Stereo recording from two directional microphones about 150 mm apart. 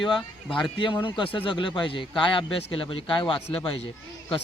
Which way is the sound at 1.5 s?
35° left (ahead or behind).